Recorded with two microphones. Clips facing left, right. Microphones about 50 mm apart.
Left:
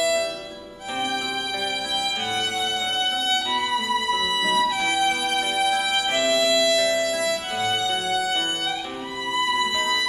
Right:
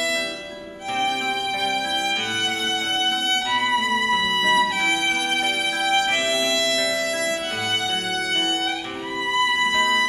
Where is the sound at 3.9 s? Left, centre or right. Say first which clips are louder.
Right 2 dB; right.